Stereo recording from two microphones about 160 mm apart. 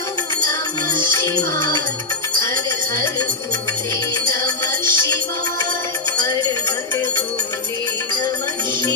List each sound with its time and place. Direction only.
1.0 s music: 15° left (ahead or behind)
2.4 s speech: 20° left (ahead or behind)
4.1 s music: 15° left (ahead or behind)